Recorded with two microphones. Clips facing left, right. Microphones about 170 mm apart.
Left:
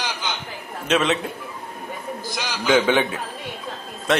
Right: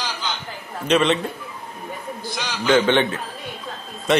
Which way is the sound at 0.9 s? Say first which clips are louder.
Right 2 dB; centre (ahead or behind).